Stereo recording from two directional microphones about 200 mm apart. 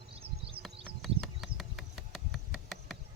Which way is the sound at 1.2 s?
Centre (ahead or behind).